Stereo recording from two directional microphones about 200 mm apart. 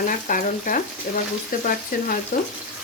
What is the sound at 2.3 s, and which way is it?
Frying, 45° left (ahead or behind).